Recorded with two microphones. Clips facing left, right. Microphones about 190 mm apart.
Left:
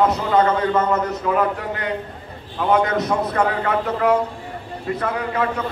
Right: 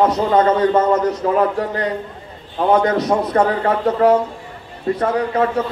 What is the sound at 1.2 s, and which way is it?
Speech, 35° right (ahead or behind).